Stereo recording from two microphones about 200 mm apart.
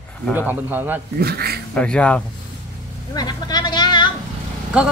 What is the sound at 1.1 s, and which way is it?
Speech, 50° right (ahead or behind).